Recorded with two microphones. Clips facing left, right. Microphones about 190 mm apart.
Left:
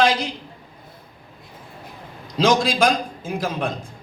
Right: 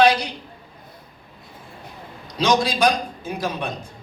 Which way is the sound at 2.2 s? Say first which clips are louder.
Left 2 dB; 90° left.